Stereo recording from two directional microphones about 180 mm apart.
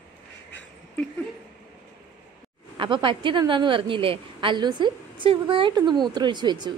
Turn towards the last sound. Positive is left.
turn(degrees=-25)  # may be behind; listen again after turning